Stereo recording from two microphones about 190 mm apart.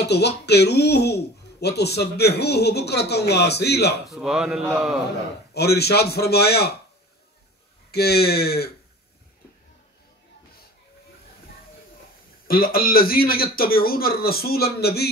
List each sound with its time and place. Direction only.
0.0 s speech: 60° left (ahead or behind)
4.1 s a man's voice: 5° right (ahead or behind)
5.5 s speech: 60° left (ahead or behind)
7.9 s speech: 55° left (ahead or behind)
12.4 s a man's voice: 50° left (ahead or behind)